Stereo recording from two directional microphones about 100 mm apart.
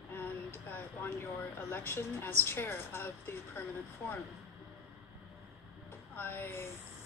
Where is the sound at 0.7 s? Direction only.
20° left (ahead or behind).